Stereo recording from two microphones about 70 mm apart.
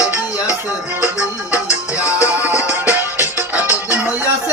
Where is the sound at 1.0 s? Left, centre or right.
Right.